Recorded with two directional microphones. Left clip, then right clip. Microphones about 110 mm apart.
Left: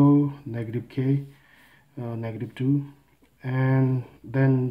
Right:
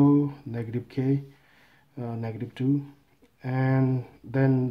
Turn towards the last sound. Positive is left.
turn(degrees=-35)  # may be behind; listen again after turning